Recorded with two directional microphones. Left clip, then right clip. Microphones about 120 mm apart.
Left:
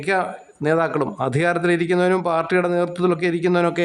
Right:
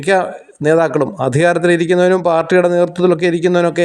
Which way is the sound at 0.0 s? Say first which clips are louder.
Right 7 dB; 30° right (ahead or behind).